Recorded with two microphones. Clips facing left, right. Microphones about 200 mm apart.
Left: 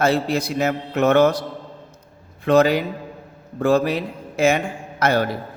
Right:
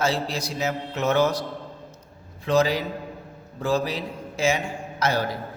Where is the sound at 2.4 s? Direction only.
60° left (ahead or behind).